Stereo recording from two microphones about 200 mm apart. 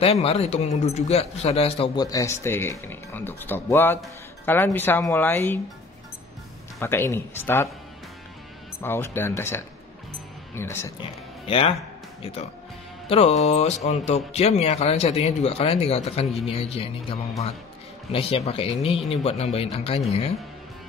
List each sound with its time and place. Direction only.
0.0 s speech: 30° left (ahead or behind); by 5.6 s 10° left (ahead or behind)
6.8 s speech: 10° left (ahead or behind)
8.8 s speech: 10° left (ahead or behind)
11.4 s speech: 30° left (ahead or behind)